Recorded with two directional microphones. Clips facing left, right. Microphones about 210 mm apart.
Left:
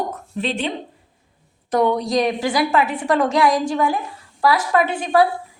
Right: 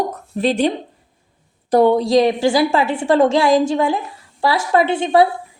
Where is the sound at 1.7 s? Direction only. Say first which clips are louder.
Right 5 dB; 30° right (ahead or behind).